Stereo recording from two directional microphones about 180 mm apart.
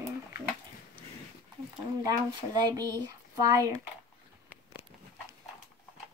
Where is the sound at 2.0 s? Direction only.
20° right (ahead or behind).